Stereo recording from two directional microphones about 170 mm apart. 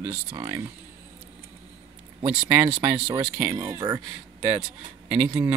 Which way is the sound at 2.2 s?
10° right (ahead or behind).